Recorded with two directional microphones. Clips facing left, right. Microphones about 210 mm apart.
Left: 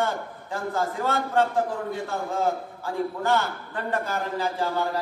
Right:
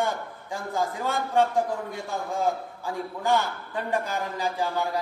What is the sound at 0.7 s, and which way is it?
Speech, 15° right (ahead or behind).